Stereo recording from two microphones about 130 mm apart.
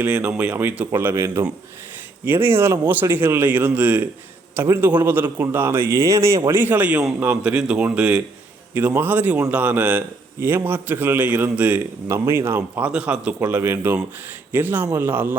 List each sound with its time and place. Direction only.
0.0 s a man's voice: 10° right (ahead or behind)